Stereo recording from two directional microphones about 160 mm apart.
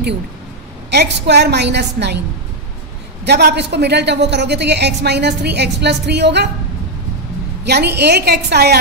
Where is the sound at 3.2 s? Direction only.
90° right.